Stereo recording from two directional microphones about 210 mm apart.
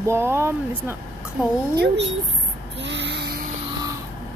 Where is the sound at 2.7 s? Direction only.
55° right (ahead or behind).